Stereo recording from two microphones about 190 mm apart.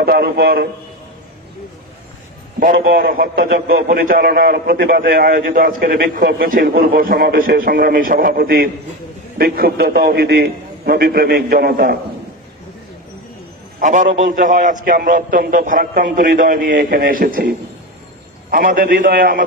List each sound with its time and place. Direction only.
0.0 s a man's voice: 55° right (ahead or behind)
2.6 s a man's voice: 50° right (ahead or behind)
13.7 s a man's voice: 40° right (ahead or behind)